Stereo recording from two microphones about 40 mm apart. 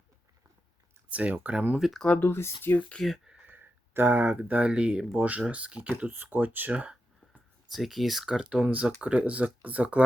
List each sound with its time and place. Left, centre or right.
1.1 s speech: right
2.1 s speech: left
2.9 s speech: left
3.5 s a sound: right
4.3 s speech: right
4.7 s speech: right
5.1 s speech: right
6.3 s speech: right
6.7 s speech: right
7.7 s speech: centre
8.3 s speech: right
8.6 s speech: right